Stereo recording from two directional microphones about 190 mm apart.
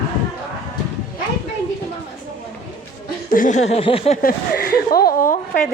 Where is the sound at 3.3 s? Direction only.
45° left (ahead or behind).